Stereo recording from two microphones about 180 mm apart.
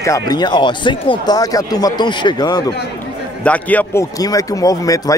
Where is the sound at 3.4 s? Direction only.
10° left (ahead or behind).